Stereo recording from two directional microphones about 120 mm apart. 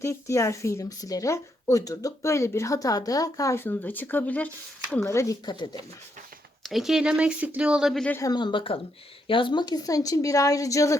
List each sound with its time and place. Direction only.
0.0 s speech: 25° left (ahead or behind)
6.6 s speech: centre (ahead or behind)
8.2 s speech: 35° left (ahead or behind)